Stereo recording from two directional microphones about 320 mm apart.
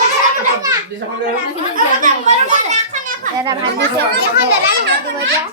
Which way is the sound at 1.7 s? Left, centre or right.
Right.